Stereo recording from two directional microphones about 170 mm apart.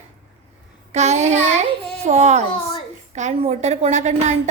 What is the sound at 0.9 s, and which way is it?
A woman's voice, 40° right (ahead or behind).